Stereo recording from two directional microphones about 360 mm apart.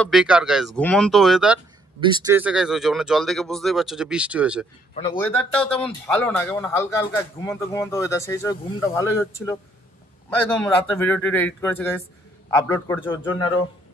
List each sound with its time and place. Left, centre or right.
0.0 s speech: centre
2.0 s speech: centre
4.9 s speech: centre
10.6 s speech: centre